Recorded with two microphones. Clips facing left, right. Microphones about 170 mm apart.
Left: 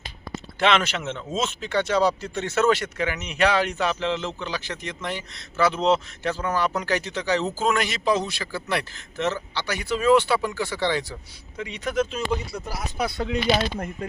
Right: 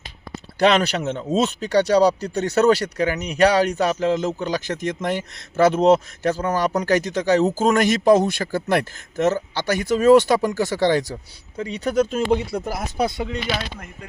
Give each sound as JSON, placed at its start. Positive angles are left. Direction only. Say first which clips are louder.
{"t": 0.6, "sound": "speech", "louder": "right 5 dB", "side_deg": -40}
{"t": 12.1, "sound": "speech", "louder": "right 7 dB", "side_deg": -55}
{"t": 13.7, "sound": "speech", "louder": "left 8 dB", "side_deg": 45}